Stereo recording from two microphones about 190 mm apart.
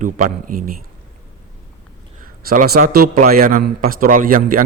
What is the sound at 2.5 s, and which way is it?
A man's voice, 50° right (ahead or behind).